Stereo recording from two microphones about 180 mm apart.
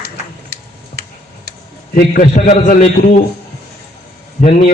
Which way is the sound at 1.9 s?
45° left (ahead or behind).